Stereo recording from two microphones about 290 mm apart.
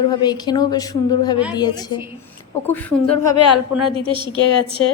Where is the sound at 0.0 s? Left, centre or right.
Centre.